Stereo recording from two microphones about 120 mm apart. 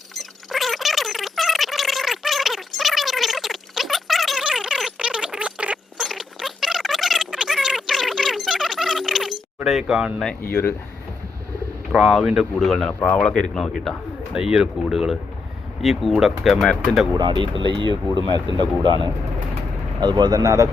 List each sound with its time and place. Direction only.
0.1 s gargling: centre (ahead or behind)
9.6 s speech: centre (ahead or behind)
10.5 s speech: 20° left (ahead or behind)
11.9 s speech: centre (ahead or behind)
12.9 s speech: 15° left (ahead or behind)
14.3 s speech: 5° right (ahead or behind)
17.2 s speech: 40° right (ahead or behind)
20.0 s speech: 40° right (ahead or behind)